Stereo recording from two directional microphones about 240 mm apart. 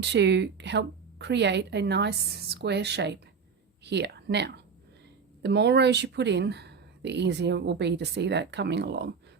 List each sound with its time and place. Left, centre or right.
0.0 s speech: right